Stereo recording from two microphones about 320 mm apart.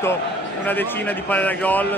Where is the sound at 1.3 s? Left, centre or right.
Centre.